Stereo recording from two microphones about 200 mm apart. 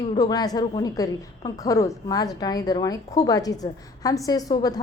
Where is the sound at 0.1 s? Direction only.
20° left (ahead or behind).